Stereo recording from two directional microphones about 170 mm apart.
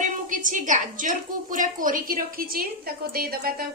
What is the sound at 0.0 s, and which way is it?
A woman's voice, 50° right (ahead or behind).